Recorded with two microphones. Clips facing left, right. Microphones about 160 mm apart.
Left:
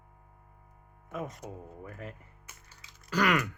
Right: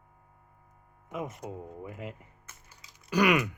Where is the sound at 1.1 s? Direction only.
15° right (ahead or behind).